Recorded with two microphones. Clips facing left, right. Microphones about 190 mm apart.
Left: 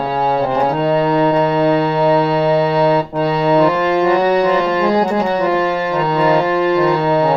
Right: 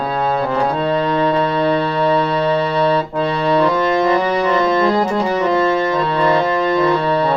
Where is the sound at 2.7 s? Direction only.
10° left (ahead or behind).